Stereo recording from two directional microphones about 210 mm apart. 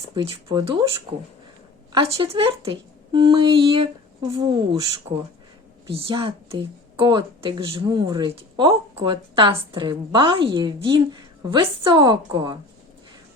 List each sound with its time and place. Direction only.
0.1 s speech: 25° right (ahead or behind)
1.9 s speech: 25° right (ahead or behind)